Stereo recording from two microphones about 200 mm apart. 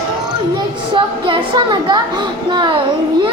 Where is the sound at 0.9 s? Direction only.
25° right (ahead or behind).